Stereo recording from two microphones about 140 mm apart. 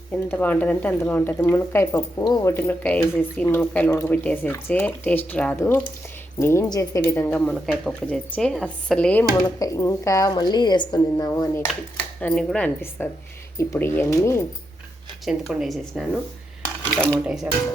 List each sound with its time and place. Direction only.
0.1 s a woman's voice: 15° left (ahead or behind)
7.3 s speech: 10° left (ahead or behind)
9.6 s a woman's voice: 25° left (ahead or behind)
12.2 s a woman's voice: 5° left (ahead or behind); by 14.4 s 20° left (ahead or behind)
15.2 s speech: 5° right (ahead or behind)